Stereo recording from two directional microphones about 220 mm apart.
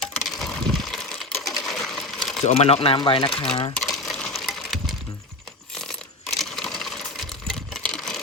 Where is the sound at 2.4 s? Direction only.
30° left (ahead or behind).